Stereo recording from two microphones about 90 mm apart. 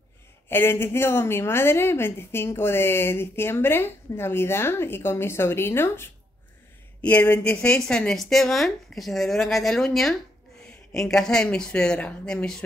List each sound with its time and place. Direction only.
0.5 s a woman's voice: 25° left (ahead or behind)
7.0 s speech: 15° left (ahead or behind)
7.6 s a woman's voice: 10° left (ahead or behind)